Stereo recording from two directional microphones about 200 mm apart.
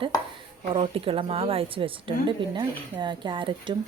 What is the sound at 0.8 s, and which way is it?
Speech, 30° right (ahead or behind).